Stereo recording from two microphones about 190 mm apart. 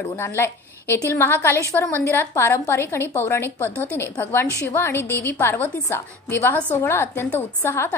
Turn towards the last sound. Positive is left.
turn(degrees=10)  # may be behind; listen again after turning